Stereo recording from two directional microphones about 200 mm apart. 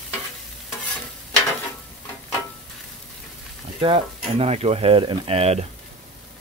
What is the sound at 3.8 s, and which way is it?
Speech, 30° right (ahead or behind).